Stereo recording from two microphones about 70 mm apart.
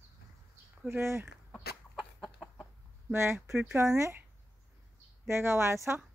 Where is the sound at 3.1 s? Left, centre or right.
Right.